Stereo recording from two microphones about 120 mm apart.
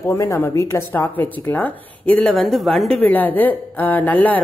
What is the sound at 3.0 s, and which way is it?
A woman's voice, 15° left (ahead or behind).